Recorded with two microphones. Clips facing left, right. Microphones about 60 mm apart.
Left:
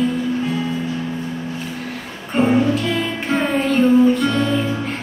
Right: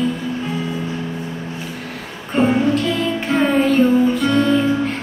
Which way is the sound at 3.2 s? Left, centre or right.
Centre.